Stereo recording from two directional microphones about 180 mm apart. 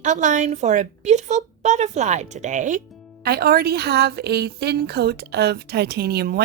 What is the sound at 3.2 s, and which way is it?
A woman's voice, 60° right (ahead or behind).